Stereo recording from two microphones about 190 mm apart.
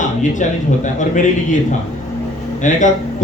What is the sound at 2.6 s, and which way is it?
Speech, 40° left (ahead or behind).